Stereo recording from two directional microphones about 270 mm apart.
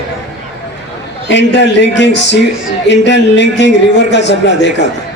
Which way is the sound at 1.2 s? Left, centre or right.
Left.